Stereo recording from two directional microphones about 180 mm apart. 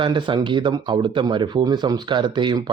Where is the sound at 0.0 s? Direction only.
25° right (ahead or behind).